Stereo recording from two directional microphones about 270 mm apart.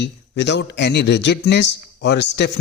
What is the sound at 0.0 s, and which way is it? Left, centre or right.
A man's voice, left.